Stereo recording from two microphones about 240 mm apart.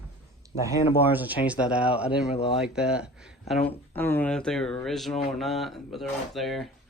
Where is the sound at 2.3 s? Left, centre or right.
Left.